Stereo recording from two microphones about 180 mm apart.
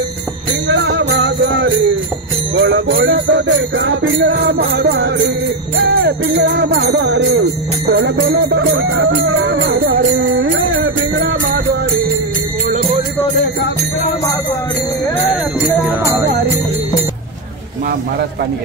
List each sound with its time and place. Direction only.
0.7 s music: 85° right
2.5 s jingle bell: 90° right; by 5.1 s 65° right (ahead or behind)
6.3 s music: 80° right
8.5 s jingle bell: 90° right; by 10.5 s 70° right (ahead or behind)
16.0 s music: 15° right (ahead or behind)